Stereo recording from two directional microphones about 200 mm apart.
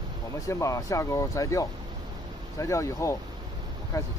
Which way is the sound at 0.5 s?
15° left (ahead or behind).